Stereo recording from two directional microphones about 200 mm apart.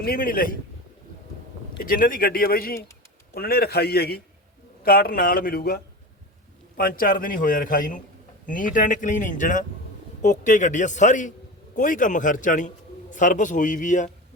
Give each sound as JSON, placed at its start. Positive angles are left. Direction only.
{"t": 0.0, "sound": "a man's voice", "side_deg": 45}
{"t": 1.8, "sound": "a man's voice", "side_deg": 45}